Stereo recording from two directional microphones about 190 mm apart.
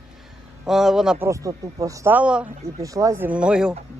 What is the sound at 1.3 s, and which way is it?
Speech, 15° right (ahead or behind).